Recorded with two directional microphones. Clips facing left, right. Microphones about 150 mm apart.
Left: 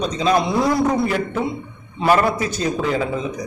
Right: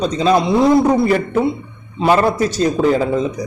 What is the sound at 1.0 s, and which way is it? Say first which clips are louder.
Speech: right 6 dB; 50° right (ahead or behind).